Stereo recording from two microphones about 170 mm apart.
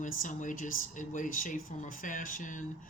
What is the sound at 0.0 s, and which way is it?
Speech, 50° left (ahead or behind).